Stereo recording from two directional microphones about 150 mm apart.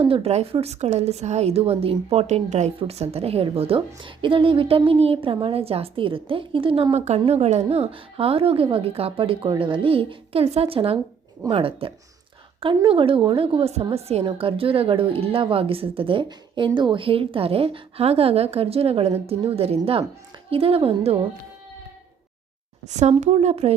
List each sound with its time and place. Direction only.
0.0 s a woman's voice: 40° right (ahead or behind)
22.9 s a woman's voice: 50° right (ahead or behind)